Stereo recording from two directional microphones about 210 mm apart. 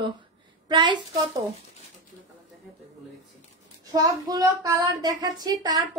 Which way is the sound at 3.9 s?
15° right (ahead or behind).